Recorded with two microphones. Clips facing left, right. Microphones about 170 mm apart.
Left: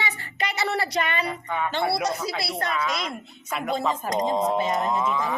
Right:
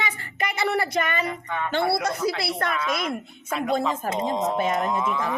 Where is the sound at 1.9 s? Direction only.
55° right (ahead or behind).